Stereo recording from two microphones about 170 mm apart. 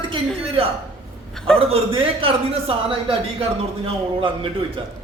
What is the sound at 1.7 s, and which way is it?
A man's voice, 35° right (ahead or behind).